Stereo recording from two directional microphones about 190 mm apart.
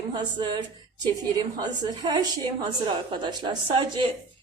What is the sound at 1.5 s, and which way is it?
Speech, 20° right (ahead or behind).